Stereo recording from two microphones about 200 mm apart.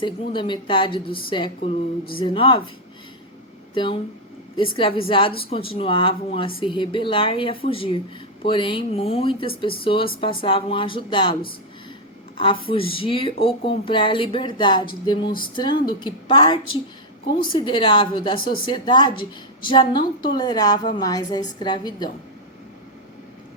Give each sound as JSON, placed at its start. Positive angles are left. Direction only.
{"t": 0.0, "sound": "speech", "side_deg": 25}
{"t": 3.8, "sound": "speech", "side_deg": 25}
{"t": 12.4, "sound": "speech", "side_deg": 25}